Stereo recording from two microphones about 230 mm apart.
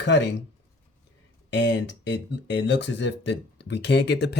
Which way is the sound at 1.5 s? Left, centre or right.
Left.